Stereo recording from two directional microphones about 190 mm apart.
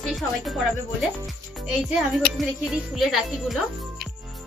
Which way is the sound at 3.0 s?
Centre (ahead or behind).